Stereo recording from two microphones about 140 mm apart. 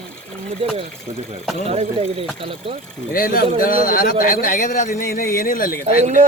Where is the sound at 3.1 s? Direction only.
90° left.